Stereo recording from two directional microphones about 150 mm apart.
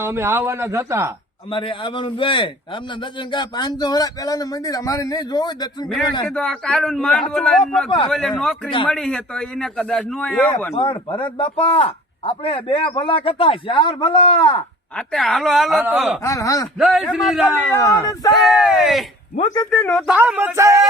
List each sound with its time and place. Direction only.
0.0 s speech: 15° right (ahead or behind)
1.5 s a man's voice: 35° left (ahead or behind)
6.2 s a man's voice: 5° left (ahead or behind)
7.9 s a man's voice: 35° left (ahead or behind)
8.1 s a man's voice: 5° left (ahead or behind)
10.8 s a man's voice: 35° left (ahead or behind)
14.9 s a man's voice: centre (ahead or behind)
16.2 s speech: 20° left (ahead or behind)
16.7 s a man's voice: 5° right (ahead or behind)
17.6 s speech: 15° left (ahead or behind)
18.3 s a man's voice: 5° right (ahead or behind)
20.1 s speech: 10° right (ahead or behind)
20.6 s a sound: 20° right (ahead or behind)